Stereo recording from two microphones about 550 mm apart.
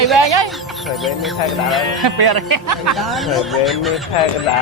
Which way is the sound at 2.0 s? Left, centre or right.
Right.